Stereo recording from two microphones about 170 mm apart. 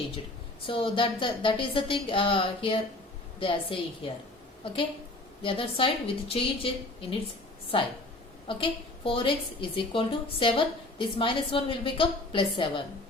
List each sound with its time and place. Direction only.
0.7 s a woman's voice: 30° left (ahead or behind)